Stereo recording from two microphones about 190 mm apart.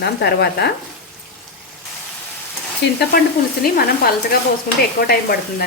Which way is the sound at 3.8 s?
55° left (ahead or behind).